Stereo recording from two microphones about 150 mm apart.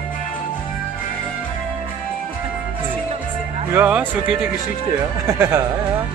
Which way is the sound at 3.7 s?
10° right (ahead or behind).